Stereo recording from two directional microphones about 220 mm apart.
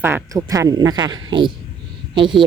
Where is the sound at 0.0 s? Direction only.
15° right (ahead or behind).